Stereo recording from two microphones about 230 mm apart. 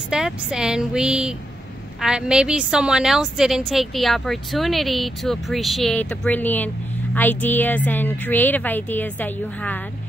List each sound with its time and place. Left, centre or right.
0.1 s a woman's voice: centre